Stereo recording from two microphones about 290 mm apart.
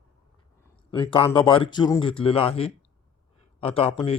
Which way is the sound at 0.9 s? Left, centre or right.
Centre.